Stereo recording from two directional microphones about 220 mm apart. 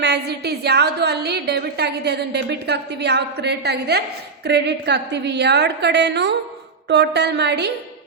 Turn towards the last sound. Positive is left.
turn(degrees=-50)  # may be behind; listen again after turning